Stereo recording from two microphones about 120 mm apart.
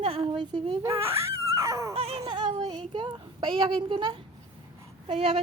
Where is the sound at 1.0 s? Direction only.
20° right (ahead or behind).